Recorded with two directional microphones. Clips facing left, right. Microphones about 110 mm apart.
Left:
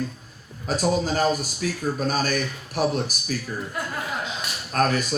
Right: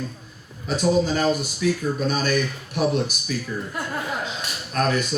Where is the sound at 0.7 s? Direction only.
45° left (ahead or behind).